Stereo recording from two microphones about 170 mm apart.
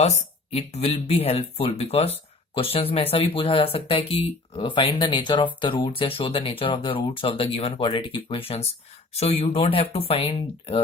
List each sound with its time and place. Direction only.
0.5 s speech: 35° left (ahead or behind)